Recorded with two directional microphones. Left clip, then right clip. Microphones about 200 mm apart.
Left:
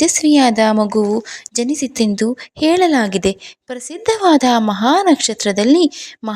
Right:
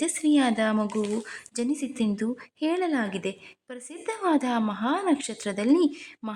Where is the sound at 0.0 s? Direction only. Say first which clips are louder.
Left 12 dB; 30° left (ahead or behind).